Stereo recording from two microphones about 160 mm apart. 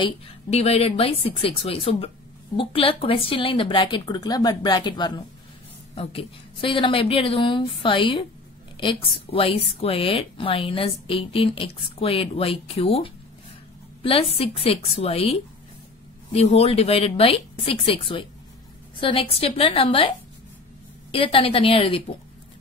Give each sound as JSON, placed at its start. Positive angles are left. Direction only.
{"t": 0.0, "sound": "a woman's voice", "side_deg": 40}
{"t": 21.1, "sound": "a woman's voice", "side_deg": 35}